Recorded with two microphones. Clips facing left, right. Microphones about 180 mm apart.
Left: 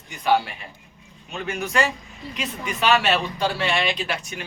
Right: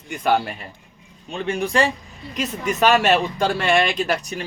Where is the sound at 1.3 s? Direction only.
30° right (ahead or behind).